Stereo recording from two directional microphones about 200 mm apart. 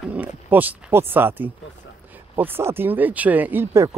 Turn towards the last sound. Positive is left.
turn(degrees=-10)  # may be behind; listen again after turning